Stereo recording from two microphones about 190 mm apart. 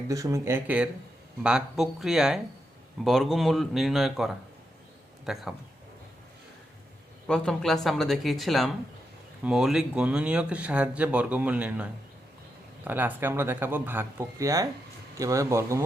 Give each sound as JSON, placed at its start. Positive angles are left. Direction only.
{"t": 0.1, "sound": "speech", "side_deg": -15}
{"t": 7.3, "sound": "speech", "side_deg": 5}
{"t": 12.9, "sound": "speech", "side_deg": -10}